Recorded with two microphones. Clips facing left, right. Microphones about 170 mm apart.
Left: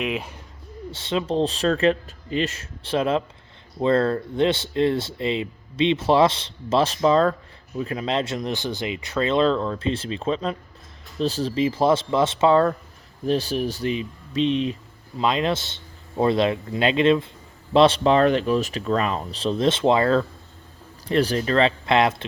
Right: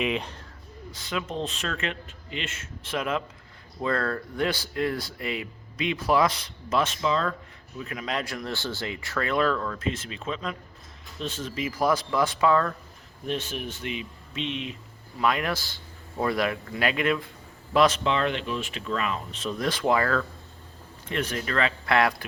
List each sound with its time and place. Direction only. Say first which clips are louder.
0.0 s speech: left 1 dB; 5° left (ahead or behind)
0.9 s speech: left 8 dB; 30° left (ahead or behind)
15.2 s speech: left 4 dB; 20° left (ahead or behind)